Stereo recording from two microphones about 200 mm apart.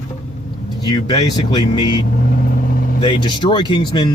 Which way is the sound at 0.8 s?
20° left (ahead or behind).